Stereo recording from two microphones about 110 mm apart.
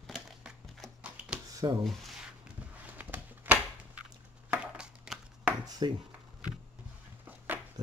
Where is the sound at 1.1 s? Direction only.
10° right (ahead or behind).